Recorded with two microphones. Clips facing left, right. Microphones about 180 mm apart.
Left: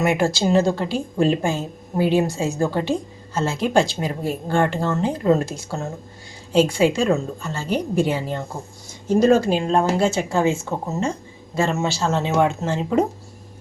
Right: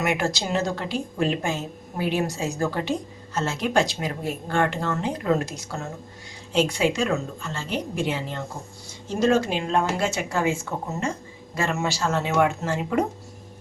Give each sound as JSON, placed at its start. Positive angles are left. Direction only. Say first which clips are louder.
{"t": 0.0, "sound": "speech", "louder": "left 6 dB", "side_deg": 30}